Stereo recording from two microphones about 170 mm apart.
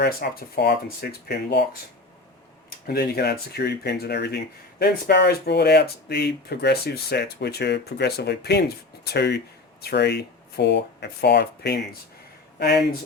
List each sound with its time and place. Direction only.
0.0 s speech: 65° left (ahead or behind)
2.6 s speech: 65° left (ahead or behind)